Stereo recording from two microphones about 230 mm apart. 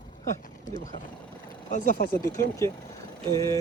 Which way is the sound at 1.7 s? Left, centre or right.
Left.